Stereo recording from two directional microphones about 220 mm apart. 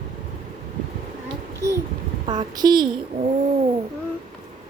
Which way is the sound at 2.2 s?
20° right (ahead or behind).